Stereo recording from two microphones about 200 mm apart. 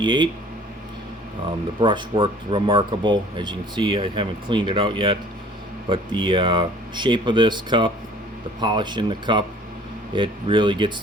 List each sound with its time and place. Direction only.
0.0 s speech: 25° right (ahead or behind)
1.8 s speech: 25° right (ahead or behind)